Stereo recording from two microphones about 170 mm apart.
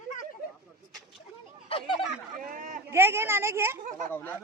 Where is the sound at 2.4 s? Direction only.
50° right (ahead or behind).